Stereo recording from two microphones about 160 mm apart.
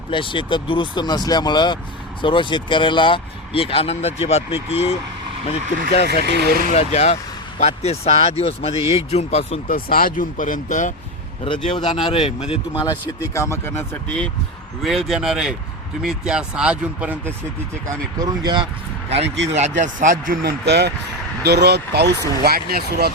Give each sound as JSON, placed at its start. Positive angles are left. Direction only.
{"t": 0.1, "sound": "speech", "side_deg": 30}
{"t": 6.2, "sound": "speech", "side_deg": -90}
{"t": 6.7, "sound": "speech", "side_deg": 40}
{"t": 9.6, "sound": "speech", "side_deg": 65}
{"t": 11.4, "sound": "speech", "side_deg": 30}
{"t": 12.8, "sound": "speech", "side_deg": 25}
{"t": 14.8, "sound": "speech", "side_deg": 0}
{"t": 17.8, "sound": "speech", "side_deg": -25}
{"t": 19.5, "sound": "speech", "side_deg": -50}
{"t": 22.4, "sound": "speech", "side_deg": -75}